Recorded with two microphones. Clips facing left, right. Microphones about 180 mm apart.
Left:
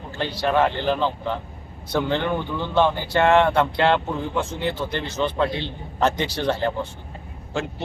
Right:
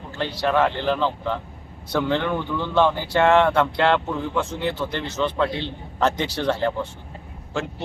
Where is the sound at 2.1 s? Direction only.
25° left (ahead or behind).